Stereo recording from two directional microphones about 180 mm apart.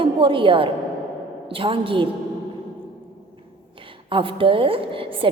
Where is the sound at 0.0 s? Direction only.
30° right (ahead or behind).